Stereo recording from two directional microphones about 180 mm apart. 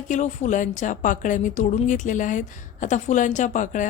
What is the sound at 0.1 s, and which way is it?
A woman's voice, 45° left (ahead or behind).